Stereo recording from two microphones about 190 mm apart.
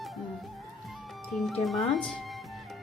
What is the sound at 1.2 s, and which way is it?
Speech, centre (ahead or behind).